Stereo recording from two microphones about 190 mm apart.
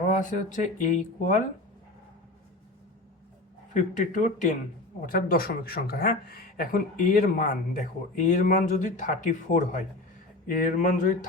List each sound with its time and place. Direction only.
0.1 s speech: 40° left (ahead or behind)
4.0 s speech: 40° left (ahead or behind)